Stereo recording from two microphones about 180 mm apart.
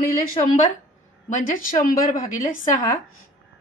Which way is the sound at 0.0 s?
50° left (ahead or behind).